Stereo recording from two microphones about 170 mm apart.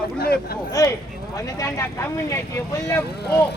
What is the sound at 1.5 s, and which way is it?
Speech, 15° left (ahead or behind).